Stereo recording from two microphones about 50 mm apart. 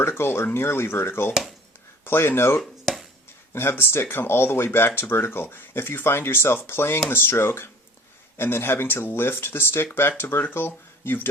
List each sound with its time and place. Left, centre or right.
0.0 s speech: left
1.3 s speech: centre
2.0 s speech: left